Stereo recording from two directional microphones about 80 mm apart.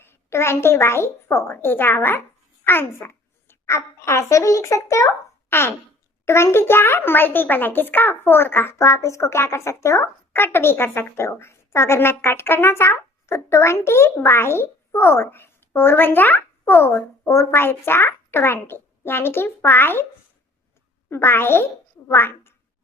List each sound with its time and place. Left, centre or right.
0.0 s a child's voice: left
21.1 s a child's voice: left